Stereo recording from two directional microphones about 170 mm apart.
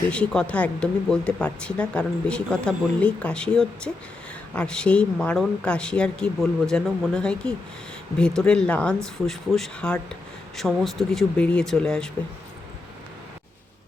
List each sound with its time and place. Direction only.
0.1 s speech: 5° left (ahead or behind)